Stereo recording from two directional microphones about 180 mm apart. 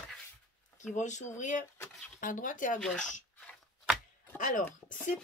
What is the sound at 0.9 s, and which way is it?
Speech, 40° left (ahead or behind).